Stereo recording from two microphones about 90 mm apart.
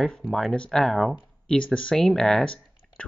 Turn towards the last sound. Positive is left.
turn(degrees=10)  # may be behind; listen again after turning